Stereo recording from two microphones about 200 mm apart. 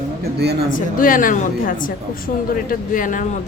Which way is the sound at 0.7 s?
45° left (ahead or behind).